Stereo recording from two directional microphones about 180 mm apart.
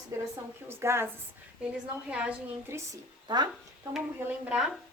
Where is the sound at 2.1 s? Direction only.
5° right (ahead or behind); by 3.5 s 25° right (ahead or behind).